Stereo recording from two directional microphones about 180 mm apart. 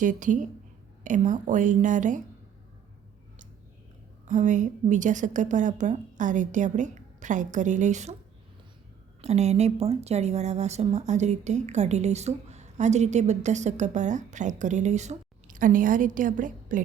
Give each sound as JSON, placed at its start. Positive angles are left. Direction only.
{"t": 0.0, "sound": "a woman's voice", "side_deg": -45}
{"t": 4.3, "sound": "a woman's voice", "side_deg": -45}
{"t": 9.2, "sound": "a woman's voice", "side_deg": -35}